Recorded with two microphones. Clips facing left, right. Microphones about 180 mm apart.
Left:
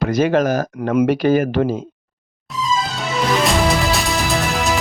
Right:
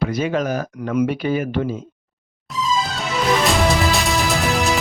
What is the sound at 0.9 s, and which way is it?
Speech, 80° left.